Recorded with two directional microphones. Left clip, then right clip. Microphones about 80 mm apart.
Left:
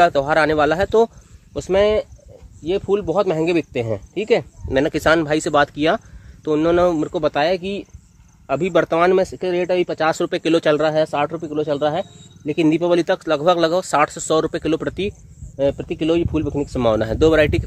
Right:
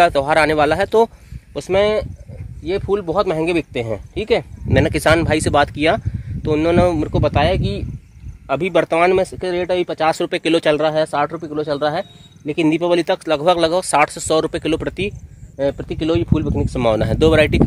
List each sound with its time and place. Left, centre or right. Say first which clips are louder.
0.0 s speech: right 1 dB; right
1.5 s speech: even; right
2.6 s speech: even; right
11.3 s speech: even; right